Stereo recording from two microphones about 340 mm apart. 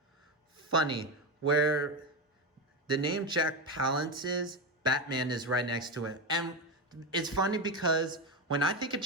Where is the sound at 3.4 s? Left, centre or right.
Right.